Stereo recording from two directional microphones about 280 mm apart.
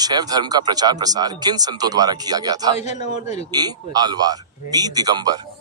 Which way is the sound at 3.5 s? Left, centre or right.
Centre.